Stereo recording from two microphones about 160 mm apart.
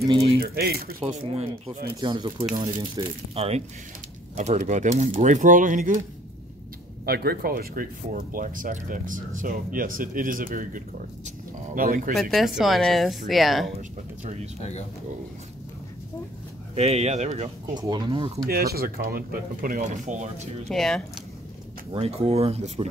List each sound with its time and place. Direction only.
0.4 s speech: 70° right (ahead or behind)
2.0 s speech: 30° right (ahead or behind)
3.3 s speech: 40° right (ahead or behind)
7.1 s speech: 70° right (ahead or behind)
12.2 s speech: centre (ahead or behind)
14.2 s speech: 40° right (ahead or behind)
16.7 s speech: 40° right (ahead or behind)
17.7 s speech: 25° right (ahead or behind)
18.5 s speech: 75° right (ahead or behind); by 20.4 s 50° right (ahead or behind)
20.6 s speech: 5° left (ahead or behind)
21.9 s speech: 40° right (ahead or behind)